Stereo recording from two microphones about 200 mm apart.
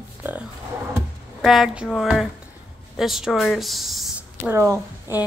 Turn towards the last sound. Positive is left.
turn(degrees=-10)  # may be behind; listen again after turning